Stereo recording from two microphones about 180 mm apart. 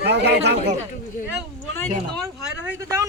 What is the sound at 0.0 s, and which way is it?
Speech, 65° right (ahead or behind).